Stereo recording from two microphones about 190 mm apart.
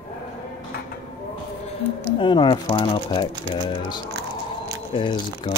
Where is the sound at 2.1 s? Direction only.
25° left (ahead or behind).